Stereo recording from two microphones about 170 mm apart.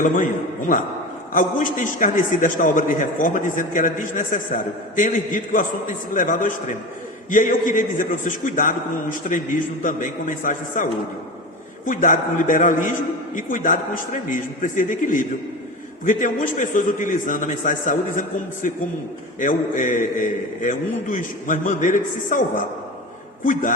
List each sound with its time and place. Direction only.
0.0 s a man's voice: 50° left (ahead or behind)
11.9 s a man's voice: 50° left (ahead or behind)